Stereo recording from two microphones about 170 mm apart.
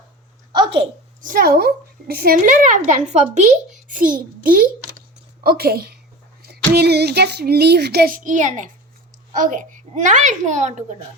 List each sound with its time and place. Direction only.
0.5 s a sound: 30° right (ahead or behind)
1.2 s a woman's voice: 55° right (ahead or behind)
3.8 s a child's voice: 55° right (ahead or behind)